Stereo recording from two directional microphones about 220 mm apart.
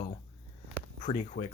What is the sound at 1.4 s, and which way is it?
Speech, 30° left (ahead or behind).